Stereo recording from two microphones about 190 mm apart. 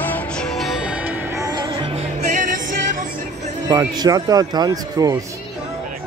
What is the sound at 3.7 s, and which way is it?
Speech, 20° right (ahead or behind).